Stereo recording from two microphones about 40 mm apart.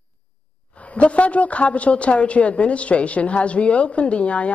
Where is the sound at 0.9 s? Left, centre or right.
Left.